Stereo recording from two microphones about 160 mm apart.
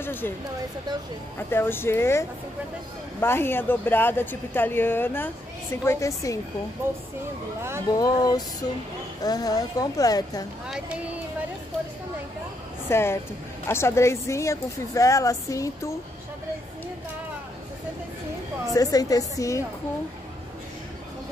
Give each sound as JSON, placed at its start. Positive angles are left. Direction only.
{"t": 0.0, "sound": "a sound", "side_deg": 15}
{"t": 1.5, "sound": "speech", "side_deg": 15}
{"t": 6.8, "sound": "speech", "side_deg": -15}
{"t": 8.0, "sound": "a woman's voice", "side_deg": 25}
{"t": 12.9, "sound": "speech", "side_deg": 15}
{"t": 18.7, "sound": "a woman's voice", "side_deg": 20}